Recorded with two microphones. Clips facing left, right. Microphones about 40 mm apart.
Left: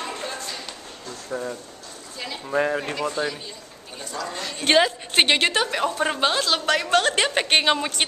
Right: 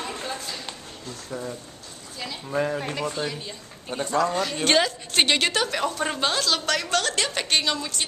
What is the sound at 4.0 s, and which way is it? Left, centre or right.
Speech, right.